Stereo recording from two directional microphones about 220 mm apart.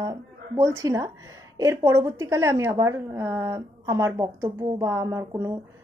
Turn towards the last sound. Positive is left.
turn(degrees=-10)  # may be behind; listen again after turning